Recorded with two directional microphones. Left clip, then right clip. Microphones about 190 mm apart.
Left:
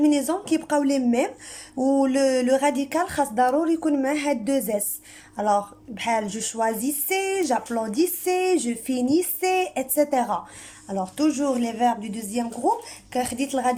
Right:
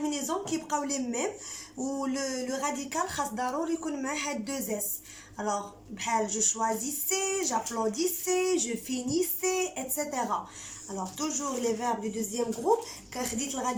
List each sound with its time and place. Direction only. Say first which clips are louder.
0.0 s a woman's voice: left 10 dB; 50° left (ahead or behind)